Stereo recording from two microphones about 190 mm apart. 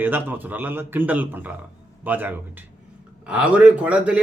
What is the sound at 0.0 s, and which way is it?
A man's voice, 10° right (ahead or behind).